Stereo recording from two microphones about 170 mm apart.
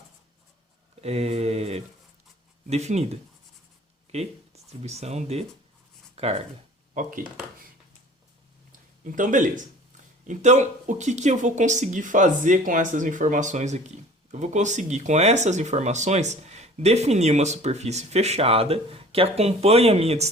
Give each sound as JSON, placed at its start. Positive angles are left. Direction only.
{"t": 1.0, "sound": "speech", "side_deg": -40}
{"t": 9.0, "sound": "speech", "side_deg": -50}